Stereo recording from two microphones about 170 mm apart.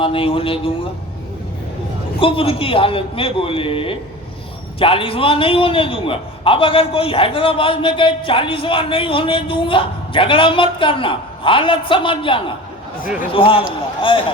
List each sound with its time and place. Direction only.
0.0 s a man's voice: 30° left (ahead or behind)
2.1 s a man's voice: 30° left (ahead or behind)